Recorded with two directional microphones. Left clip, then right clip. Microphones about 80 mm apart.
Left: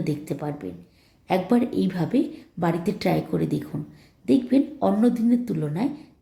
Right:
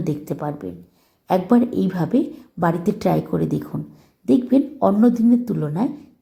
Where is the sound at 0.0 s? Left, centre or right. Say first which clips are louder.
Right 3 dB; right.